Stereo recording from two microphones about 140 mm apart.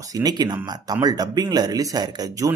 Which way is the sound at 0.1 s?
30° right (ahead or behind).